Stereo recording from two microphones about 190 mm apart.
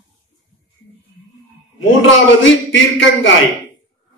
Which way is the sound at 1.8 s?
80° left.